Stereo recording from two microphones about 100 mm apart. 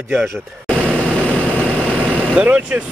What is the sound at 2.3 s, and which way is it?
Speech, 10° right (ahead or behind).